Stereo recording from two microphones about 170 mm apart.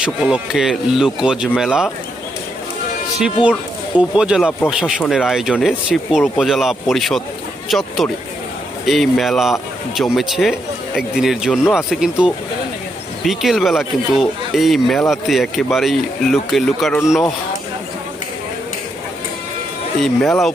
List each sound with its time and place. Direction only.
0.0 s speech: 5° right (ahead or behind)
3.9 s speech: 5° right (ahead or behind)
20.0 s speech: 5° left (ahead or behind)